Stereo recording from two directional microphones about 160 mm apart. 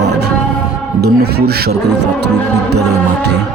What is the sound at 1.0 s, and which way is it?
Speech, 85° right.